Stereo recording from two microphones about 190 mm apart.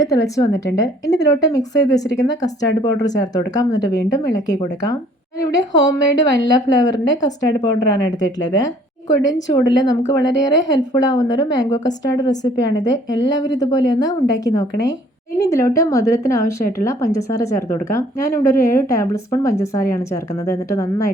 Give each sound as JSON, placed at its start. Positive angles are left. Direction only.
{"t": 0.0, "sound": "a woman's voice", "side_deg": 15}